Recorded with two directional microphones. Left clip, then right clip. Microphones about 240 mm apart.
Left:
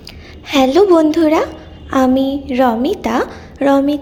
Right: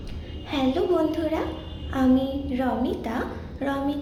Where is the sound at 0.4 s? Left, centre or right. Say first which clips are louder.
Left 14 dB; left.